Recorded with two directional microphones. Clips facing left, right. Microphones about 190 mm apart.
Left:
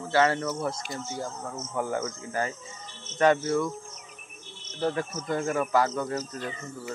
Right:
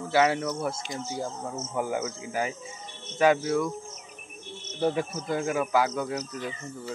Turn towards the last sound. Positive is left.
turn(degrees=-10)  # may be behind; listen again after turning